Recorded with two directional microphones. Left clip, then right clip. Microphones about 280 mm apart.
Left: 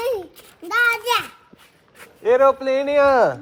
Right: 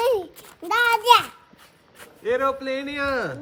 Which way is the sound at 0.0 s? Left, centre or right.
Centre.